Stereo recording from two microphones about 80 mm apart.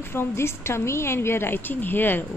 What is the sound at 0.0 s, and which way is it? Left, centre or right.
Speech, left.